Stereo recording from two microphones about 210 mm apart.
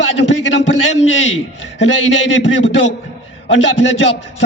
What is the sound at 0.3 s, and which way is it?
Speech, 60° left (ahead or behind).